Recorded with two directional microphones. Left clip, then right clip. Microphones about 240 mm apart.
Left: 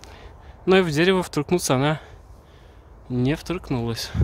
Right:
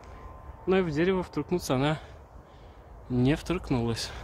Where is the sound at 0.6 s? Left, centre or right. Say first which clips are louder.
Left 8 dB; left.